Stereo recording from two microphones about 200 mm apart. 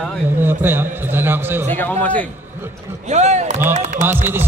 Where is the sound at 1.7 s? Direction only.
10° left (ahead or behind).